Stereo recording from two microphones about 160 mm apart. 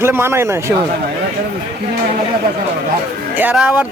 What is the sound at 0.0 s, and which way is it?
Speech, 15° right (ahead or behind).